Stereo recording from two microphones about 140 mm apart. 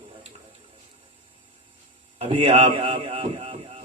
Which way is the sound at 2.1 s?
45° right (ahead or behind).